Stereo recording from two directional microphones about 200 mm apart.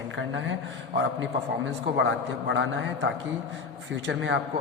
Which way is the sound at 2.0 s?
65° right (ahead or behind).